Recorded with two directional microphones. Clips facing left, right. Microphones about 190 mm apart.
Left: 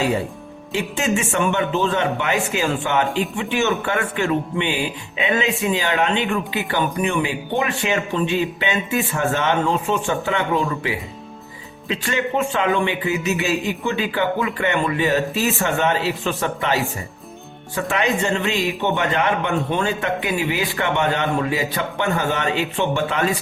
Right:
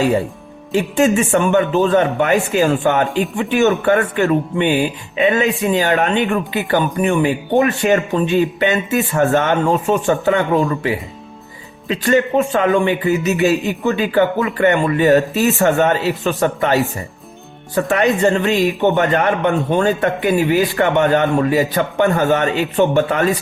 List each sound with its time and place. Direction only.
0.7 s speech: 45° right (ahead or behind)
11.9 s speech: 45° right (ahead or behind)
17.7 s speech: 40° right (ahead or behind)